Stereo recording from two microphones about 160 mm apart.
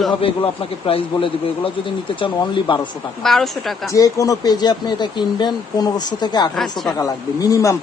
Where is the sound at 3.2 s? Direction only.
Centre (ahead or behind).